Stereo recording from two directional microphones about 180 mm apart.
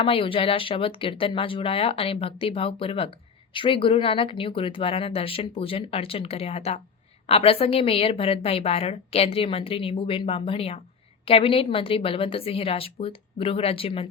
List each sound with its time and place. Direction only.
0.0 s a woman's voice: 30° left (ahead or behind)